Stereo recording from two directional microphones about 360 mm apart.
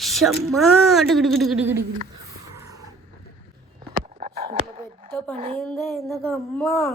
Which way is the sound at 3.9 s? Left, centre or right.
Centre.